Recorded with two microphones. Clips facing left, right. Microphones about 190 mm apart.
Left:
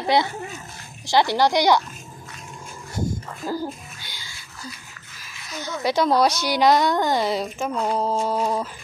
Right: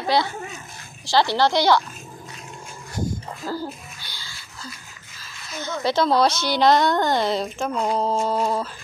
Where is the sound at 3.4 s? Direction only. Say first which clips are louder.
Left 3 dB; 15° left (ahead or behind).